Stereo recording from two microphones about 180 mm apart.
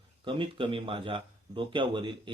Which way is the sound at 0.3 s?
30° right (ahead or behind).